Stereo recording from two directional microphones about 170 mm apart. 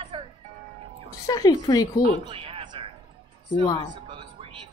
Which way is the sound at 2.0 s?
30° right (ahead or behind).